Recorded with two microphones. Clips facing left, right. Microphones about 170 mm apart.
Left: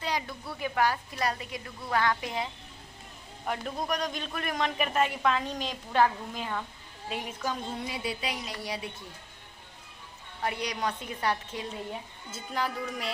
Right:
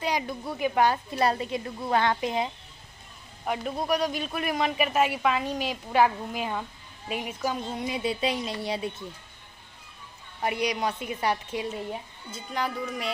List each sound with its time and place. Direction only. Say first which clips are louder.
0.0 s a woman's voice: right 4 dB; 15° right (ahead or behind)
3.4 s a man's voice: right 4 dB; 5° right (ahead or behind); by 8.9 s 25° right (ahead or behind)
10.4 s a man's voice: right 4 dB; 10° right (ahead or behind)
12.3 s a woman's voice: right 2 dB; centre (ahead or behind)